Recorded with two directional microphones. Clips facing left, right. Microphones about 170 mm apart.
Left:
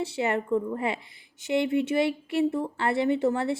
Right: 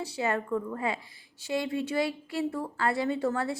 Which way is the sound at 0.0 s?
25° left (ahead or behind).